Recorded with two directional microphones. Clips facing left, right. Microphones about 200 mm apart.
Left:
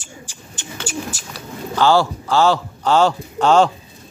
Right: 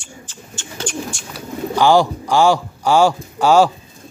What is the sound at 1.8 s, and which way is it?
A man's voice, 15° right (ahead or behind).